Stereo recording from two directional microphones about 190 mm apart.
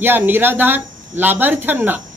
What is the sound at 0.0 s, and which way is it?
Speech, 10° right (ahead or behind).